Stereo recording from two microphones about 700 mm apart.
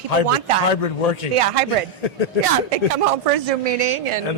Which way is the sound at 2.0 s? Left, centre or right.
Left.